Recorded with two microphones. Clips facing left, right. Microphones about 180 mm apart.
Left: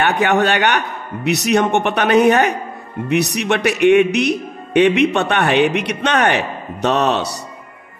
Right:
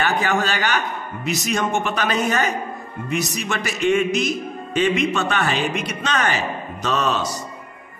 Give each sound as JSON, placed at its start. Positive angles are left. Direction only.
{"t": 0.0, "sound": "speech", "side_deg": 65}